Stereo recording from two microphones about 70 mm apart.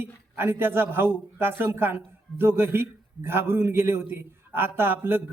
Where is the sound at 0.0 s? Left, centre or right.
Right.